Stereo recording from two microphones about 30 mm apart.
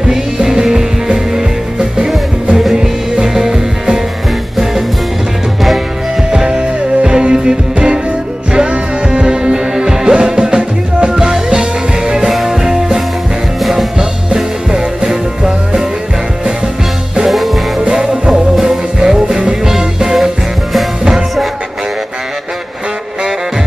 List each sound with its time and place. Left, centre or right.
0.0 s music: centre
6.3 s music: right
12.3 s music: centre
13.9 s music: right
17.9 s music: right
19.6 s music: centre